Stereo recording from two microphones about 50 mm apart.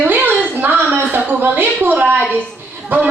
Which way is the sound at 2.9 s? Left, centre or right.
Right.